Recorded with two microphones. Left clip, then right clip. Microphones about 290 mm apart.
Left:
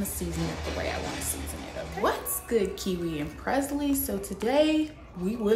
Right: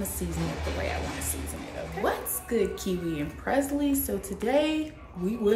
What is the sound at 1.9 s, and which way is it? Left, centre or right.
A woman's voice, centre.